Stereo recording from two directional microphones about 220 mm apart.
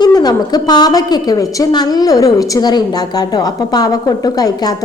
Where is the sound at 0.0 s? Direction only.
20° left (ahead or behind).